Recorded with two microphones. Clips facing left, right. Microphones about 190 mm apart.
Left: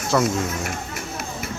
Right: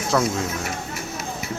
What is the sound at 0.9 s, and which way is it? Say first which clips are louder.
Music: even; 55° left (ahead or behind).